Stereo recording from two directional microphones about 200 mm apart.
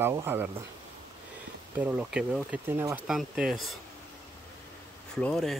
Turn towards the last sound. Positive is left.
turn(degrees=5)  # may be behind; listen again after turning